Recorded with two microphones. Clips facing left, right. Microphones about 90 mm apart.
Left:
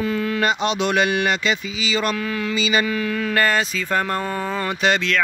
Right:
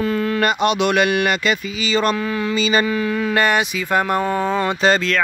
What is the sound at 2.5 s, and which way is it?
Speech, 40° right (ahead or behind).